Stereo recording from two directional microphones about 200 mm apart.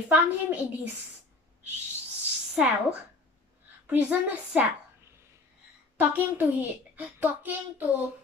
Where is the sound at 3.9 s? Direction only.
10° right (ahead or behind).